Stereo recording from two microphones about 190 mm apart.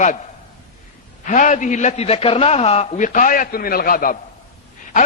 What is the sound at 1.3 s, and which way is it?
A man's voice, 40° left (ahead or behind).